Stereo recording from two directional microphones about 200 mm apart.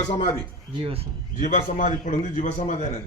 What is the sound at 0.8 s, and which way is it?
Speech, 30° right (ahead or behind).